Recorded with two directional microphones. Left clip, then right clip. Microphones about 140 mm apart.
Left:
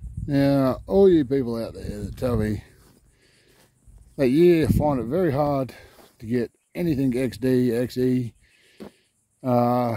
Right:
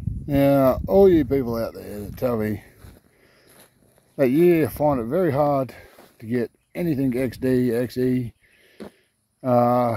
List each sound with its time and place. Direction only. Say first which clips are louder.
0.3 s speech: right 4 dB; 20° left (ahead or behind)
4.2 s speech: even; 25° left (ahead or behind)
8.8 s a sound: right 2 dB; 90° right
9.4 s speech: right 3 dB; 25° left (ahead or behind)